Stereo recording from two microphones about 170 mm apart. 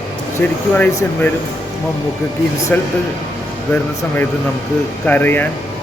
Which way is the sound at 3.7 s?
10° left (ahead or behind).